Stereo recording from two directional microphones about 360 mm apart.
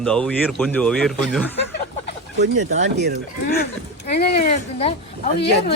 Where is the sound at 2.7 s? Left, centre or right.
Right.